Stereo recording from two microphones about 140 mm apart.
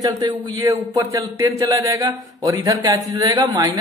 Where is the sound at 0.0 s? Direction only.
30° right (ahead or behind).